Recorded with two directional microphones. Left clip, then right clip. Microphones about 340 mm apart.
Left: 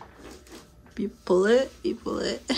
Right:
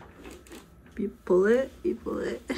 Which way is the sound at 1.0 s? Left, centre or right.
Centre.